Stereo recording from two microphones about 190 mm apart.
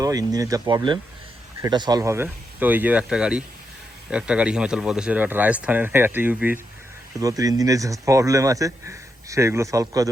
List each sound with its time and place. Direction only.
0.0 s speech: 20° right (ahead or behind)